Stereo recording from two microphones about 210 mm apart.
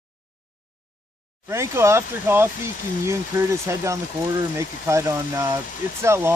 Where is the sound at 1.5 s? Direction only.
15° right (ahead or behind).